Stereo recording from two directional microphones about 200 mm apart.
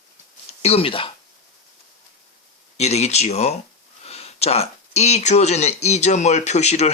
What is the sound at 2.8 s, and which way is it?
Speech, 35° left (ahead or behind).